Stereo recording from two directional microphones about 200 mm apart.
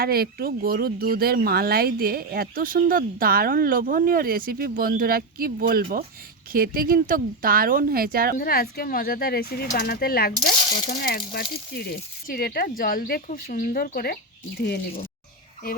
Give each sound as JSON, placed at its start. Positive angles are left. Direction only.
{"t": 0.0, "sound": "speech", "side_deg": -50}
{"t": 8.4, "sound": "speech", "side_deg": 50}